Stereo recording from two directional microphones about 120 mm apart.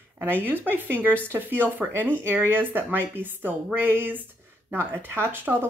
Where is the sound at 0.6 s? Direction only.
15° right (ahead or behind).